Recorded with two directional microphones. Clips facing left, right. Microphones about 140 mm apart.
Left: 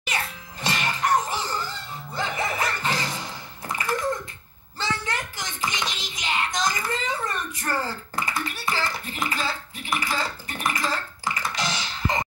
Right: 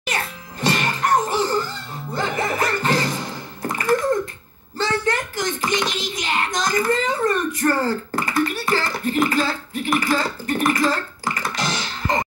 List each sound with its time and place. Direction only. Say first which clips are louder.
0.0 s music: right 4 dB; 45° right (ahead or behind)
3.6 s bathtub: right 8 dB; 45° right (ahead or behind)
4.7 s a sound: right 7 dB; 50° right (ahead or behind)